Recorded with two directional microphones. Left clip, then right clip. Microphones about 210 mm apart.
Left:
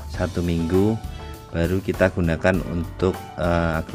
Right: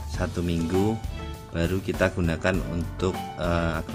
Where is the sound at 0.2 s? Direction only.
20° left (ahead or behind).